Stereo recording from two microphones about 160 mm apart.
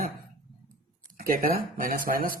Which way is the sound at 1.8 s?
60° right (ahead or behind).